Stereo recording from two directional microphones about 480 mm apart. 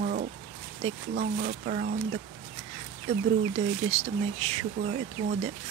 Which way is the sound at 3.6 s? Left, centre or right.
Centre.